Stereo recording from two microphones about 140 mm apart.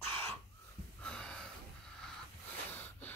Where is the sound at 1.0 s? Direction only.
5° left (ahead or behind).